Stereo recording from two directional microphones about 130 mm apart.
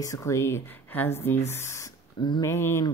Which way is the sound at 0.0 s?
25° left (ahead or behind).